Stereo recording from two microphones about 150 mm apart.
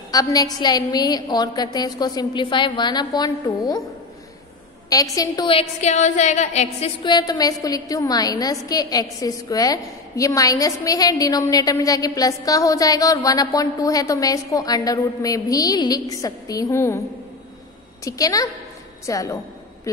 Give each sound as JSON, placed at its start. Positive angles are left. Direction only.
{"t": 0.1, "sound": "a woman's voice", "side_deg": 25}
{"t": 4.8, "sound": "a woman's voice", "side_deg": 25}
{"t": 5.5, "sound": "a woman's voice", "side_deg": 45}
{"t": 7.1, "sound": "a woman's voice", "side_deg": 25}
{"t": 18.0, "sound": "a woman's voice", "side_deg": 25}